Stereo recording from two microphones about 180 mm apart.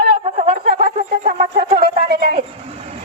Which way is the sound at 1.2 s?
40° right (ahead or behind).